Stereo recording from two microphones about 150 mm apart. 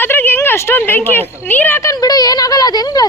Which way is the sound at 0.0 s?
15° left (ahead or behind).